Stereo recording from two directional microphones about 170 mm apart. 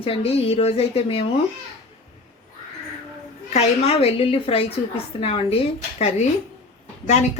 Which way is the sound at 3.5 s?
35° left (ahead or behind).